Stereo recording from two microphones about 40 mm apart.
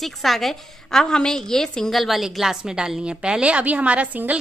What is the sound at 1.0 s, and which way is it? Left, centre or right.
Speech, centre.